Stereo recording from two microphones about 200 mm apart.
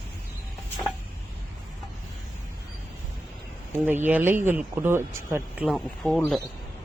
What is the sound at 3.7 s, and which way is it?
Speech, 10° right (ahead or behind).